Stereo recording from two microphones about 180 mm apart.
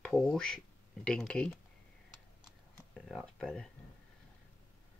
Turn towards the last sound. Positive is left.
turn(degrees=5)  # may be behind; listen again after turning